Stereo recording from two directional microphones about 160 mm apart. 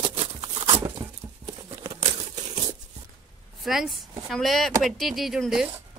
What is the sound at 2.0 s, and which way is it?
Crumpling, 40° right (ahead or behind).